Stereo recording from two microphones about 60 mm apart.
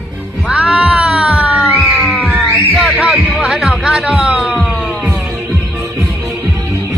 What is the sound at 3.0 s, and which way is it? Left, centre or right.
Music, centre.